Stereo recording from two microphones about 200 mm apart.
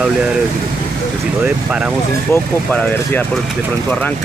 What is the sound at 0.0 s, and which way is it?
Speech, 5° right (ahead or behind).